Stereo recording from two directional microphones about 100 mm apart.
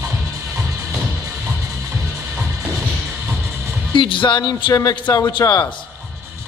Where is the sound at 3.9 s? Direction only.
55° left (ahead or behind).